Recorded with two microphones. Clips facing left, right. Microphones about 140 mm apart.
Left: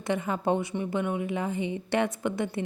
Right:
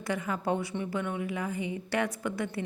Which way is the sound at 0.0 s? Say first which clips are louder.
Left 4 dB; 25° left (ahead or behind).